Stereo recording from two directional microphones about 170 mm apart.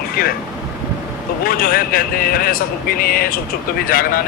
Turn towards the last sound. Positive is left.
turn(degrees=60)  # may be behind; listen again after turning